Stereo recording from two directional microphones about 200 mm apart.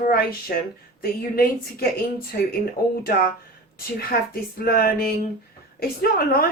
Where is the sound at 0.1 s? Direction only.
45° left (ahead or behind).